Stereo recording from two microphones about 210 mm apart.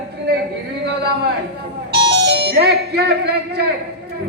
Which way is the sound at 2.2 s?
50° right (ahead or behind).